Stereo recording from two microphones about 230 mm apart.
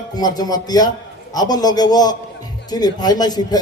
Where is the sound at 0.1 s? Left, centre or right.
Centre.